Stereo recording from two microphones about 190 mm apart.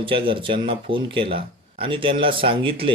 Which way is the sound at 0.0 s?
25° right (ahead or behind).